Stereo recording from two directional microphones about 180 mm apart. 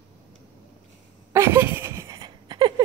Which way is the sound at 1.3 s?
15° right (ahead or behind).